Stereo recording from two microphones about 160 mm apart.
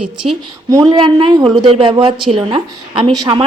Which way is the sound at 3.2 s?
30° right (ahead or behind).